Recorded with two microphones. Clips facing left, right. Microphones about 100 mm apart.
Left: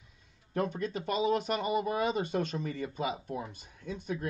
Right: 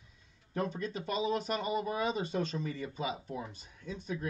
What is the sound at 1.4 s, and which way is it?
Speech, 15° left (ahead or behind).